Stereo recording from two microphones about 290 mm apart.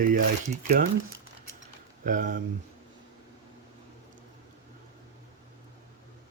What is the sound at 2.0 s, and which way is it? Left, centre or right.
Speech, right.